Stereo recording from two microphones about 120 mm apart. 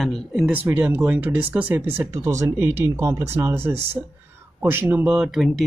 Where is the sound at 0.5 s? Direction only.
15° right (ahead or behind).